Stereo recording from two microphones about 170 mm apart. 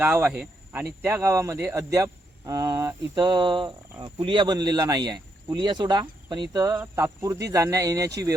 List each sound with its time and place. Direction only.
0.0 s speech: 10° right (ahead or behind)